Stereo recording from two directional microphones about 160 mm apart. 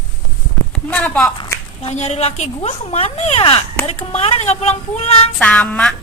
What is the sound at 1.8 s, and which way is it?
Speech, 45° left (ahead or behind).